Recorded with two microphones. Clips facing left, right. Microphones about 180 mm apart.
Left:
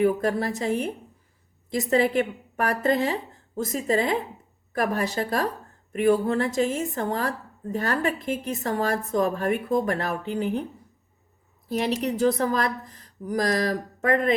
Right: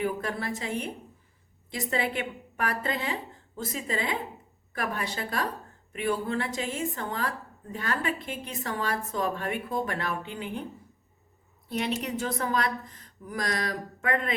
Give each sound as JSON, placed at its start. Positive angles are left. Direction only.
{"t": 0.0, "sound": "a woman's voice", "side_deg": 40}
{"t": 11.7, "sound": "a woman's voice", "side_deg": 40}